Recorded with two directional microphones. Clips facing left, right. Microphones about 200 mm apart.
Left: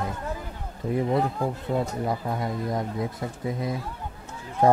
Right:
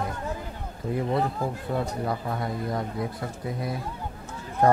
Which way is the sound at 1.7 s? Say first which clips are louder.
Left 2 dB; 10° left (ahead or behind).